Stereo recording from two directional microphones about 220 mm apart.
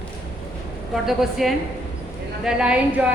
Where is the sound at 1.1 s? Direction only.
Centre (ahead or behind).